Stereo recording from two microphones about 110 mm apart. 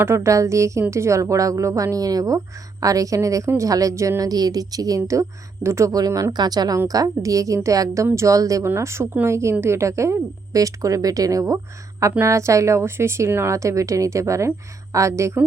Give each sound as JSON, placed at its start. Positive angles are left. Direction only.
{"t": 0.0, "sound": "a woman's voice", "side_deg": -25}